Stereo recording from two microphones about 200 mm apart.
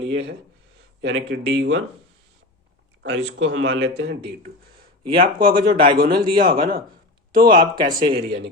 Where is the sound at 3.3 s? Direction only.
70° right (ahead or behind).